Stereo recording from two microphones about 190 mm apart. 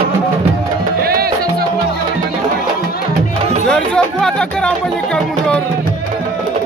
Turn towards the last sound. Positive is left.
turn(degrees=5)  # may be behind; listen again after turning